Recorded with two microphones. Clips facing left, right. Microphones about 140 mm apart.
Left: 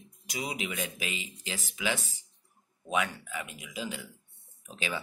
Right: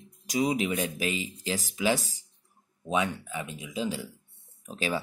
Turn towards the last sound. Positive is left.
turn(degrees=-40)  # may be behind; listen again after turning